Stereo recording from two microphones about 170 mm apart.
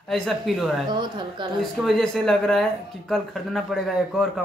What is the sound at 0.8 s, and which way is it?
Speech, 25° right (ahead or behind).